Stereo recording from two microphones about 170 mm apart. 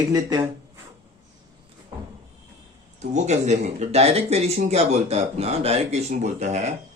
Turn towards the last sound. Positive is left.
turn(degrees=-40)  # may be behind; listen again after turning